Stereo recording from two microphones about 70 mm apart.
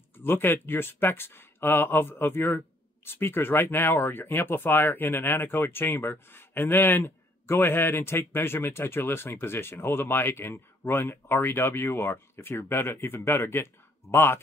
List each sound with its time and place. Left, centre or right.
0.2 s speech: left